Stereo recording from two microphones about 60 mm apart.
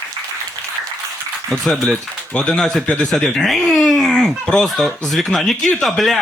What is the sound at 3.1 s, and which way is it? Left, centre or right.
Speech, centre.